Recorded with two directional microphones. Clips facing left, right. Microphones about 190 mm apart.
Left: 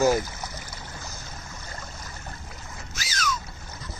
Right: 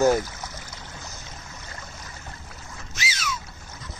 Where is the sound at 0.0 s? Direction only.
5° left (ahead or behind).